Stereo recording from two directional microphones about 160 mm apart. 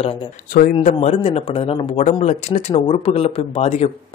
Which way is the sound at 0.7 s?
40° left (ahead or behind).